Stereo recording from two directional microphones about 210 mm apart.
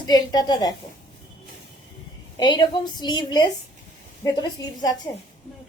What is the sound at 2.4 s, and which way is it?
A woman's voice, 20° left (ahead or behind).